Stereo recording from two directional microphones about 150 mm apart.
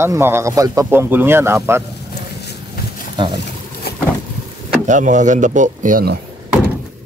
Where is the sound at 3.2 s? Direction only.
30° right (ahead or behind).